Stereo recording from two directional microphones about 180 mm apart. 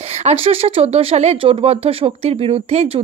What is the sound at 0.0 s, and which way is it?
Speech, 35° right (ahead or behind).